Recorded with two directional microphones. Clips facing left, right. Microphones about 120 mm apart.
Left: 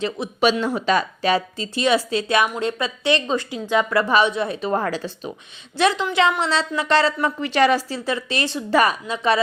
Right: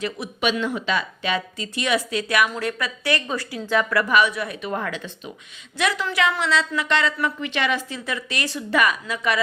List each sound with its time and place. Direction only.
0.0 s a woman's voice: 30° left (ahead or behind)